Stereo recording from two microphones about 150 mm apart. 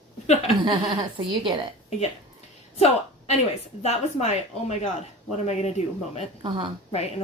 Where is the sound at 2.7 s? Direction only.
45° left (ahead or behind).